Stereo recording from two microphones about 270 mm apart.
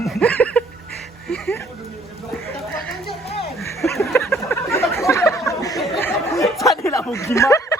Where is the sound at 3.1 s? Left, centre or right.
Left.